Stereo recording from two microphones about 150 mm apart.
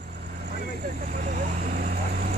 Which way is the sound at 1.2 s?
65° right (ahead or behind).